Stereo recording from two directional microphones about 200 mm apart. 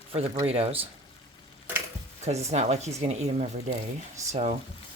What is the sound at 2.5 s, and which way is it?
Speech, 35° right (ahead or behind).